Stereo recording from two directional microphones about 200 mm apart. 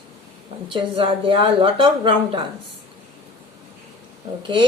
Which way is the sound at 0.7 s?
25° right (ahead or behind).